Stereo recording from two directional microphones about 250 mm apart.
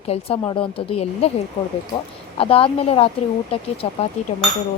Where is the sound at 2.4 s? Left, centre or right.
Left.